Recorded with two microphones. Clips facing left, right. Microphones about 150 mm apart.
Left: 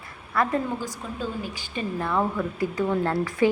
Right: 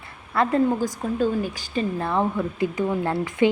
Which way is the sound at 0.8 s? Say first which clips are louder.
Right 8 dB; 45° right (ahead or behind).